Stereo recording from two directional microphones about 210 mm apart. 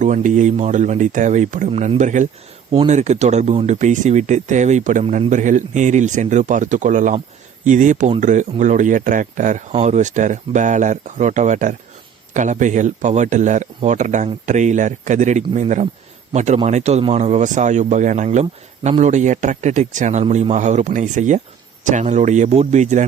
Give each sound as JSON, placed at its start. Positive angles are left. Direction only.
{"t": 0.0, "sound": "speech", "side_deg": -35}